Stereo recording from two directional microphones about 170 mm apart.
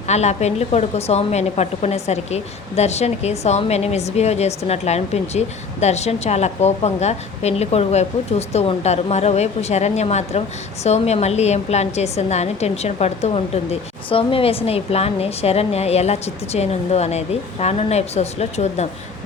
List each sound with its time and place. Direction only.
0.1 s a woman's voice: 40° left (ahead or behind)